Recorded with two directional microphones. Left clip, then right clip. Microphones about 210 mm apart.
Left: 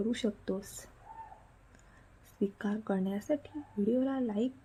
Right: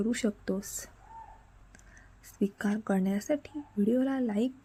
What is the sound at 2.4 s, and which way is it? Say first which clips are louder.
A woman's voice: right 3 dB; 15° right (ahead or behind).